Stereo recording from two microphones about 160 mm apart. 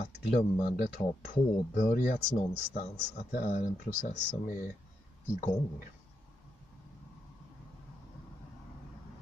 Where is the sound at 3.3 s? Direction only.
65° left (ahead or behind).